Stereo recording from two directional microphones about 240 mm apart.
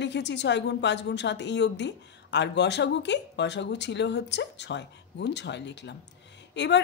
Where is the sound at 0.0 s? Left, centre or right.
Left.